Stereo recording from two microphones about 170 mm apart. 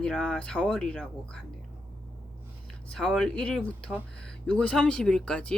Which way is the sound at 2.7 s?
5° left (ahead or behind).